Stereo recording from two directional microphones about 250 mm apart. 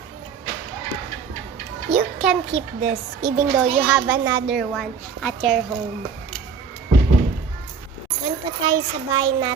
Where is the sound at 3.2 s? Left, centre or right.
Centre.